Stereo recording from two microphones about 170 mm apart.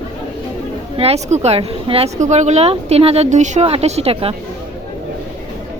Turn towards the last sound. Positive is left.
turn(degrees=-35)  # may be behind; listen again after turning